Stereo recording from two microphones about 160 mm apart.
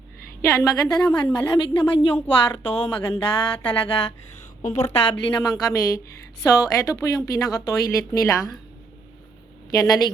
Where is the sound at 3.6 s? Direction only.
35° left (ahead or behind).